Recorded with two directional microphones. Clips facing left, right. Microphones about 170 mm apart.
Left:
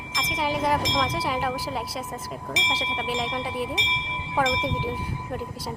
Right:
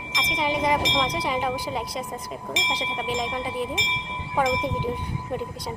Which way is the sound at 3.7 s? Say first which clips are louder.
Even; 30° left (ahead or behind).